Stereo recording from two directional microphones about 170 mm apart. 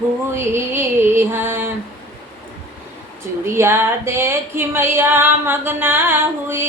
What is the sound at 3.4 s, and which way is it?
Music, 15° right (ahead or behind).